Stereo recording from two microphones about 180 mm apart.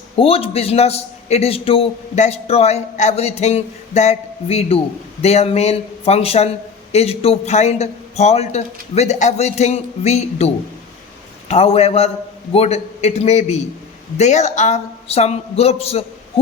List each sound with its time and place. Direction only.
0.2 s a man's voice: 30° left (ahead or behind)